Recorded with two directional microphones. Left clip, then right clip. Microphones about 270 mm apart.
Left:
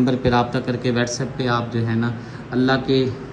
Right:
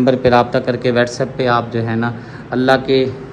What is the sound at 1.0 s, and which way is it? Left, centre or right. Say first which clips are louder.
A man's voice: right 7 dB; centre.